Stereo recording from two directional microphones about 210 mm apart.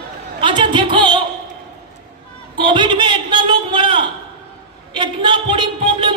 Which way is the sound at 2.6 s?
20° right (ahead or behind).